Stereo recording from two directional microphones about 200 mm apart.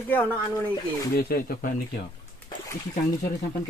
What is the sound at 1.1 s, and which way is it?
Speech, 50° left (ahead or behind).